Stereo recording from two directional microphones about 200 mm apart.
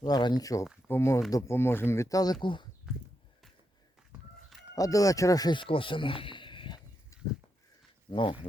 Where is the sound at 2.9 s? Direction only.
Centre (ahead or behind).